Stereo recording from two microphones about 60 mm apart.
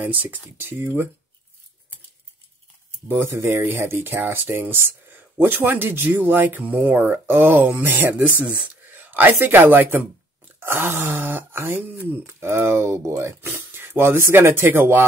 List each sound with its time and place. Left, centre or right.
0.0 s speech: right
3.1 s speech: right